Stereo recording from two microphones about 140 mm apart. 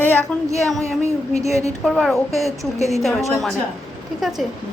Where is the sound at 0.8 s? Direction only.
20° right (ahead or behind).